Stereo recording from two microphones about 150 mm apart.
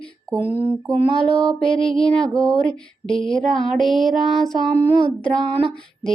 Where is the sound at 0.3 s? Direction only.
15° left (ahead or behind).